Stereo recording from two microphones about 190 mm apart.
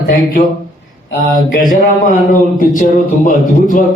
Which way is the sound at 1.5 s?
45° left (ahead or behind).